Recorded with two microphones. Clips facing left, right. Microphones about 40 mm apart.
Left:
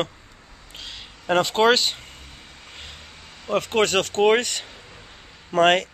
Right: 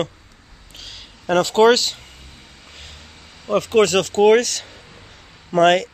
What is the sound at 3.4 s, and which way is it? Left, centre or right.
Speech, left.